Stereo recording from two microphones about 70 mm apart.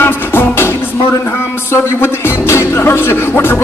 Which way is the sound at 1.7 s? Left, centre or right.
Left.